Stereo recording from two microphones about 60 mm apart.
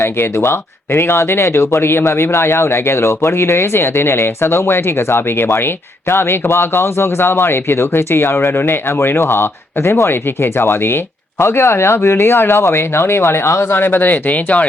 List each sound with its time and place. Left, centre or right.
0.0 s speech: left